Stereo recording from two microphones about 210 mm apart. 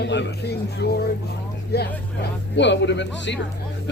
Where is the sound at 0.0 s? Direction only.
55° left (ahead or behind).